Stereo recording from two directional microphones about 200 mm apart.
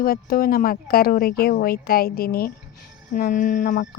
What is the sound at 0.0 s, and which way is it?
Speech, 45° left (ahead or behind).